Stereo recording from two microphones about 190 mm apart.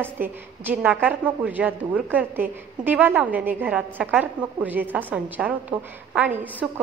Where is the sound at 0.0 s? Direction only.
10° right (ahead or behind).